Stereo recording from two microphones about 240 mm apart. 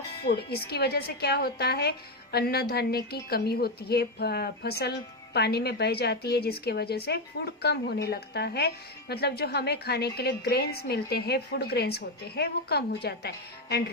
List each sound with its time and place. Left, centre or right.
0.3 s a woman's voice: left